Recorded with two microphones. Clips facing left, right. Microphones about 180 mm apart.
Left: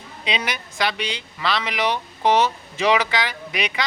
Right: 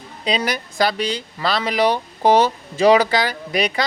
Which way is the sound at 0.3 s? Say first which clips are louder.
Right 5 dB; 35° right (ahead or behind).